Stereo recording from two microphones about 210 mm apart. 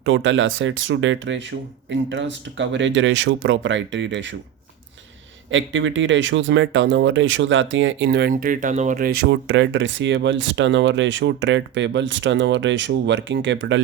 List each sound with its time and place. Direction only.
0.0 s speech: 65° right (ahead or behind)
5.5 s speech: 65° right (ahead or behind)